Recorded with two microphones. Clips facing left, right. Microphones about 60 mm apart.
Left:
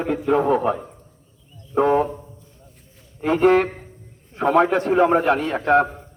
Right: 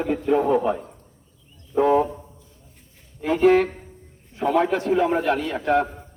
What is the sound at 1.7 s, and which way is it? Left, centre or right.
Speech, left.